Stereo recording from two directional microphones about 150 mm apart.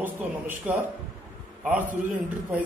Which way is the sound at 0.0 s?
10° right (ahead or behind).